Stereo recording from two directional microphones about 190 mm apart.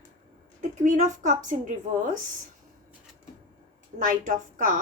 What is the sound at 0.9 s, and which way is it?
Speech, 40° right (ahead or behind).